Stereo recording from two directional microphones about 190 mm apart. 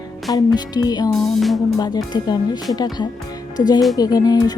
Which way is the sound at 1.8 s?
20° left (ahead or behind).